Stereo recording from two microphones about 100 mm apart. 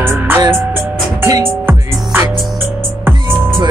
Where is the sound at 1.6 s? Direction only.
20° right (ahead or behind).